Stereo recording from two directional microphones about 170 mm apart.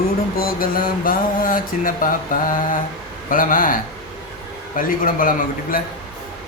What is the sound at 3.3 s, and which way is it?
Speech, 55° left (ahead or behind).